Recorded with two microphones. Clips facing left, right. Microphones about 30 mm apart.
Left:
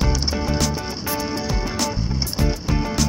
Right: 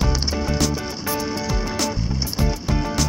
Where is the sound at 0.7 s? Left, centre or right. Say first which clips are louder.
Even; centre.